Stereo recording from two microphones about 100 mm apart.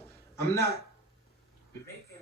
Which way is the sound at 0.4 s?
25° left (ahead or behind).